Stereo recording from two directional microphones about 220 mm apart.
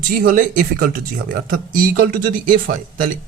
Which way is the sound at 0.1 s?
40° right (ahead or behind).